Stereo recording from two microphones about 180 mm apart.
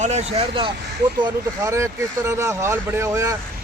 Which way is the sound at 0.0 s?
40° right (ahead or behind).